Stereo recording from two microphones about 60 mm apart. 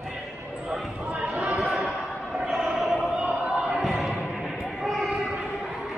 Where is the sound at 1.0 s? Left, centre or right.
Right.